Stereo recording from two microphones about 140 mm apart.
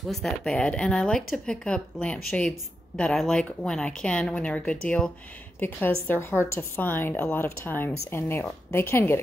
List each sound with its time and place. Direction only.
0.0 s speech: centre (ahead or behind); by 9.2 s 15° left (ahead or behind)